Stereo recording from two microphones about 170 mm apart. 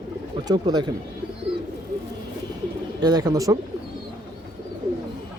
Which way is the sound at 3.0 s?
25° right (ahead or behind).